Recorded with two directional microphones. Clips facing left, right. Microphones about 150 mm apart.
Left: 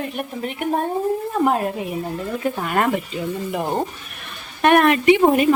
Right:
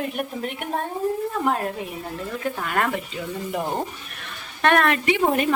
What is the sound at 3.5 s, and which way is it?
A woman's voice, 5° left (ahead or behind).